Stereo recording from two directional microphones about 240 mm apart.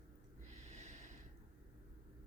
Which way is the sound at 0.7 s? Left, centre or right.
Right.